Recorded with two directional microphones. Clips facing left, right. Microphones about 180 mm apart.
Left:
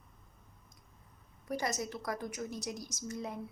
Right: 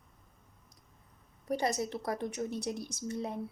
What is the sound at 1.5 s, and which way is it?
Speech, 30° right (ahead or behind).